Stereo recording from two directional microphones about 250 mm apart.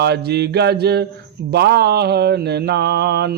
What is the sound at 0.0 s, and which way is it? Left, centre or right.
Speech, right.